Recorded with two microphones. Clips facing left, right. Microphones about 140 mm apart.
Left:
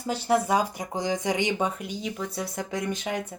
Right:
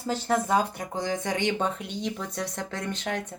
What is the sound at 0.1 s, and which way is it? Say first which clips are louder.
Speech: left 1 dB; 10° left (ahead or behind).